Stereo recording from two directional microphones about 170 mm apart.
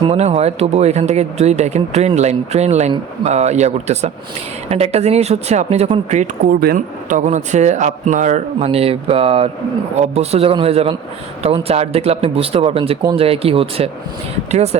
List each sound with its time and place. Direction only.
0.0 s speech: 35° right (ahead or behind)
6.6 s speech: 55° right (ahead or behind); by 14.8 s 40° right (ahead or behind)